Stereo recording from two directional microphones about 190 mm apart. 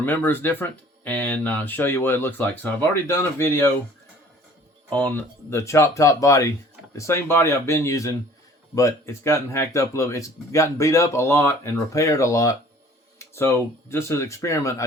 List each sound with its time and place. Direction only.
0.0 s speech: 10° left (ahead or behind)
4.9 s speech: 5° left (ahead or behind)